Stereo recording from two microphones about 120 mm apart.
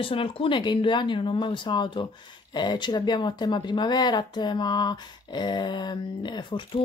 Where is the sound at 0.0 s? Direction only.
50° left (ahead or behind).